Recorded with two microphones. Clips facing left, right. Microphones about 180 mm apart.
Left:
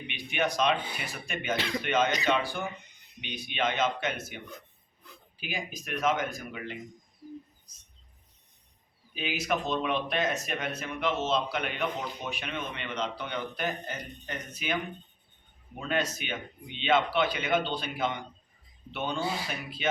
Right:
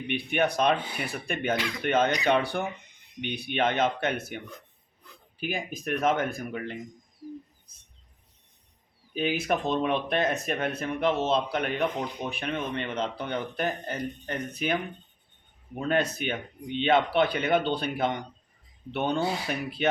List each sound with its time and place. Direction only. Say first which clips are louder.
0.1 s speech: right 5 dB; 55° right (ahead or behind)
5.4 s a man's voice: right 5 dB; 55° right (ahead or behind)
9.1 s a man's voice: right 4 dB; 50° right (ahead or behind)
15.8 s speech: right 5 dB; 55° right (ahead or behind)